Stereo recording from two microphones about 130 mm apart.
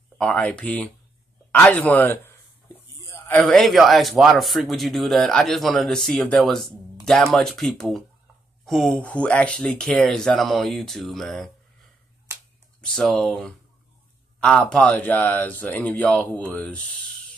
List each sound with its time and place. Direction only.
0.2 s speech: 10° left (ahead or behind)
3.0 s a sound: 25° left (ahead or behind)
3.3 s a man's voice: centre (ahead or behind)
12.8 s a man's voice: 5° left (ahead or behind)